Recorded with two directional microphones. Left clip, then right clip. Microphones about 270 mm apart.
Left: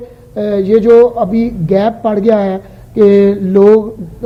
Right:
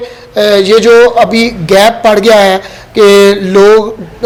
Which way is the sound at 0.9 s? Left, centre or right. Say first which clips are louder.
Right 2 dB; right.